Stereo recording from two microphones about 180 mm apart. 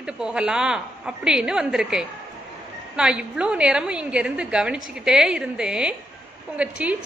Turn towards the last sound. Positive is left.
turn(degrees=-5)  # may be behind; listen again after turning